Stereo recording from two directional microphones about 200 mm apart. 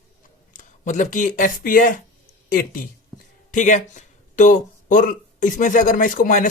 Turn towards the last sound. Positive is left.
turn(degrees=40)  # may be behind; listen again after turning